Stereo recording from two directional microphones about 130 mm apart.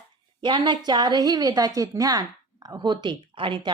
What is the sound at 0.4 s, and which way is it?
A woman's voice, 35° right (ahead or behind).